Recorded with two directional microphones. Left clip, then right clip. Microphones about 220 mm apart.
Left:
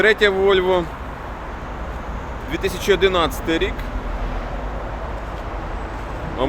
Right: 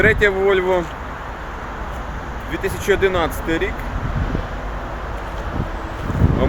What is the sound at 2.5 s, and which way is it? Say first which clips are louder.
Speech: even; 10° left (ahead or behind).